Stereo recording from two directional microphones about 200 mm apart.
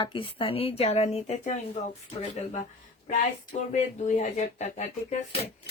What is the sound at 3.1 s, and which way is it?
Speech, 35° left (ahead or behind).